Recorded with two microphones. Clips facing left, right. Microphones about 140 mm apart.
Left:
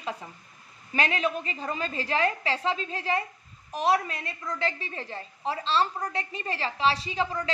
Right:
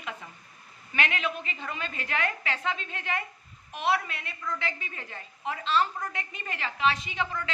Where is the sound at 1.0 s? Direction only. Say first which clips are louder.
Left 3 dB; 35° left (ahead or behind).